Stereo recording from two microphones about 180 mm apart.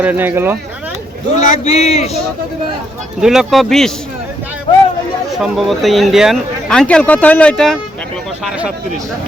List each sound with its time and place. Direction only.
0.0 s speech: 10° right (ahead or behind)
1.4 s a man's voice: 35° left (ahead or behind)
3.2 s speech: 5° right (ahead or behind)
5.3 s speech: centre (ahead or behind)